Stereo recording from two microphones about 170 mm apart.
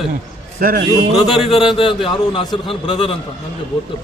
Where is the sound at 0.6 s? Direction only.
55° right (ahead or behind).